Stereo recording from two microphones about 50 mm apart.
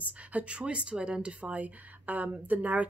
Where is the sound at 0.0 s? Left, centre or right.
Right.